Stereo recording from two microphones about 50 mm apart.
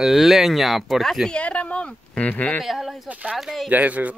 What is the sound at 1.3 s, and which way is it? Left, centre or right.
Speech, left.